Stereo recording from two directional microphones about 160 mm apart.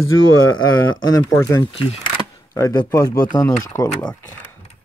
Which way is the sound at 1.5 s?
20° left (ahead or behind).